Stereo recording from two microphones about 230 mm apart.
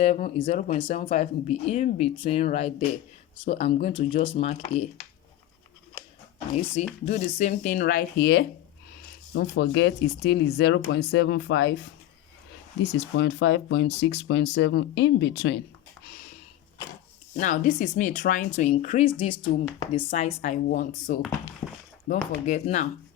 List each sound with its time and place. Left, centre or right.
0.3 s speech: left
7.0 s speech: left
12.8 s speech: left
17.3 s speech: left